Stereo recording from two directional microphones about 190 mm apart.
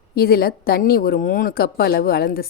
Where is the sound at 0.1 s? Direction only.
55° left (ahead or behind).